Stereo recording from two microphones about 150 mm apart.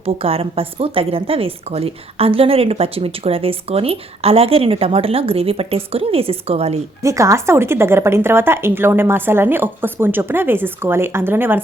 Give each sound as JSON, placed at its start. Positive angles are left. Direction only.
{"t": 0.0, "sound": "a woman's voice", "side_deg": -40}
{"t": 7.0, "sound": "a woman's voice", "side_deg": -20}